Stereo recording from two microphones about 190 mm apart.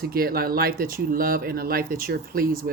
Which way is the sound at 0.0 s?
50° right (ahead or behind).